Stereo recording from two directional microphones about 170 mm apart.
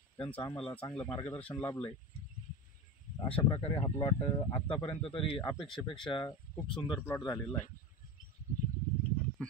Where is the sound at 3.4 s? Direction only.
30° left (ahead or behind).